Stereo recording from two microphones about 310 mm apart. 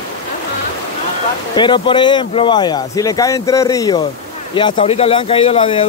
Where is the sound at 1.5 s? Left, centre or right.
Centre.